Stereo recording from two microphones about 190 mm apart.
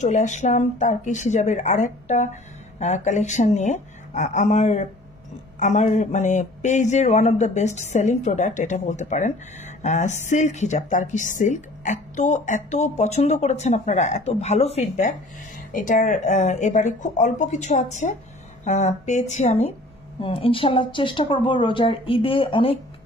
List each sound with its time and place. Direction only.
0.0 s a woman's voice: 40° left (ahead or behind)